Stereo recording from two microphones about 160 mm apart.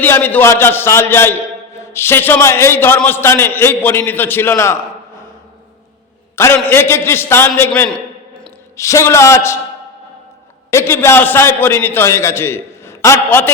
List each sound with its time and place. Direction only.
0.0 s a man's voice: 10° left (ahead or behind)
6.3 s a man's voice: 15° left (ahead or behind)
10.7 s a man's voice: 15° left (ahead or behind)